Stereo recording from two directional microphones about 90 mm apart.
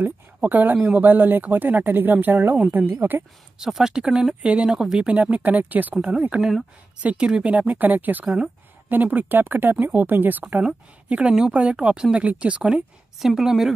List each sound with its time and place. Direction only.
0.0 s speech: 20° right (ahead or behind)
3.5 s speech: 5° right (ahead or behind)
5.0 s speech: 15° right (ahead or behind)